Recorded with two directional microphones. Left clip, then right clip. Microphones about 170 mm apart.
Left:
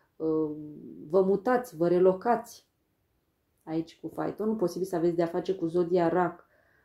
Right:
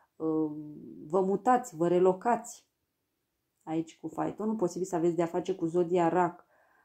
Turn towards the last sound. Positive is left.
turn(degrees=-25)  # may be behind; listen again after turning